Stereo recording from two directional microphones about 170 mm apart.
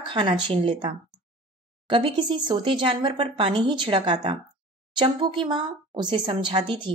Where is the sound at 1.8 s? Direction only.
30° right (ahead or behind).